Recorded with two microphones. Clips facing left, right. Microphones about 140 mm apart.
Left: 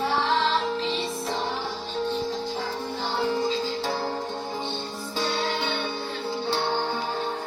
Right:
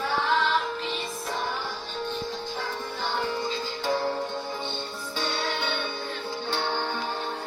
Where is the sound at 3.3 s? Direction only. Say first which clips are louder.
Left 5 dB; 35° left (ahead or behind).